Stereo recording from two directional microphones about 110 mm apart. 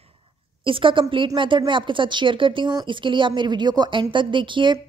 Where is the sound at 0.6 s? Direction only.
50° right (ahead or behind).